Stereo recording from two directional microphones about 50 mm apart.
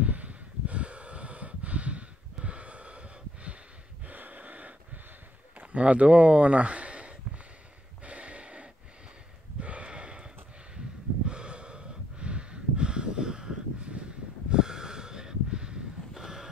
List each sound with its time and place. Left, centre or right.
0.0 s a sound: right
4.1 s gasp: right
5.6 s speech: right
8.0 s snort: right
9.6 s a sound: right
11.2 s snort: centre